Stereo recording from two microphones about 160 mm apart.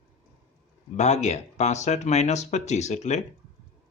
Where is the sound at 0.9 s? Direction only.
45° left (ahead or behind).